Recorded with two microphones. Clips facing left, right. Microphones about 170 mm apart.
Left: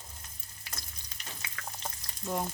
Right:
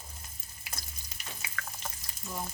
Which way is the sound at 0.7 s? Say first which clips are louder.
Right 1 dB; 5° right (ahead or behind).